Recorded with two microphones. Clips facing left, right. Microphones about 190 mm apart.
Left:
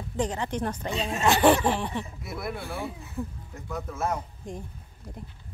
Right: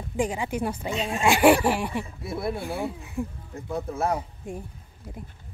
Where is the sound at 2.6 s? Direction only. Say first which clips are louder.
Right 4 dB; 15° right (ahead or behind).